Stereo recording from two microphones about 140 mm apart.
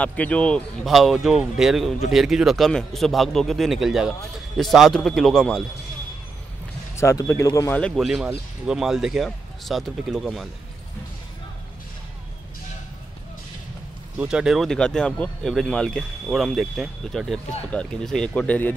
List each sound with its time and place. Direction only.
0.0 s speech: 10° left (ahead or behind)
7.0 s speech: 20° left (ahead or behind)
7.8 s speech: centre (ahead or behind)
14.1 s speech: 5° right (ahead or behind); by 18.7 s 10° left (ahead or behind)